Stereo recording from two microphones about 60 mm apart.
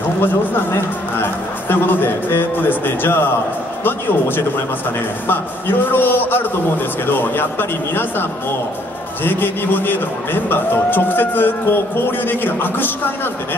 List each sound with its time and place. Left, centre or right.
0.2 s a man's voice: left
5.2 s a man's voice: left